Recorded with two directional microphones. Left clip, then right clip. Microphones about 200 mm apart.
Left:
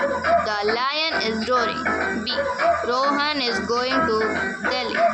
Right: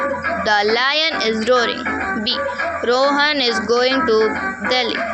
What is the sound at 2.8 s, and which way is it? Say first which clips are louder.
Speech: right 6 dB; 20° right (ahead or behind).